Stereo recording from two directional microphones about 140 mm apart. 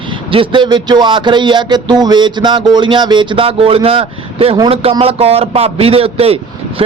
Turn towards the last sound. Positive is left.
turn(degrees=-45)  # may be behind; listen again after turning